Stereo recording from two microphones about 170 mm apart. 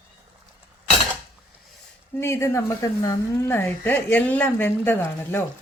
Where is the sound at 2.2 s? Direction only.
15° left (ahead or behind).